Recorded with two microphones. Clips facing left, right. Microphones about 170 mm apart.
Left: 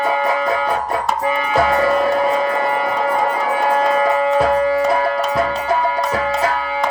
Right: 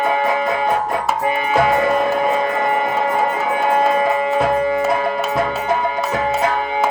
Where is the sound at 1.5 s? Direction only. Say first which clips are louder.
Even; 35° left (ahead or behind).